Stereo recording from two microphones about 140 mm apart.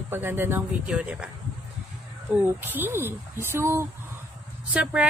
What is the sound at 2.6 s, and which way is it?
Speech, 15° right (ahead or behind).